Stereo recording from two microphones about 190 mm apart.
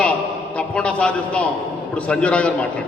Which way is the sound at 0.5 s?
5° left (ahead or behind).